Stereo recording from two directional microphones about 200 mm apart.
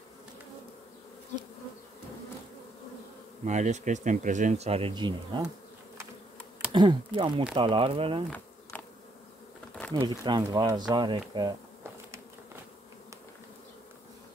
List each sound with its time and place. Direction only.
3.4 s speech: 35° right (ahead or behind)
6.7 s speech: 25° right (ahead or behind)
8.7 s insect: 10° left (ahead or behind)
9.9 s speech: 20° right (ahead or behind)